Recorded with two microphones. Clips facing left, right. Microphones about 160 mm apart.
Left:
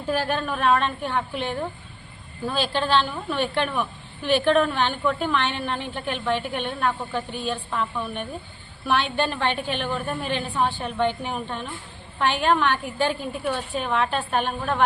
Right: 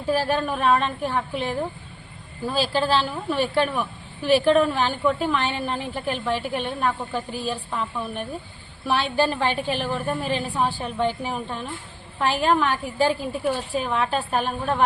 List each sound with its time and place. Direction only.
0.0 s a woman's voice: 5° right (ahead or behind)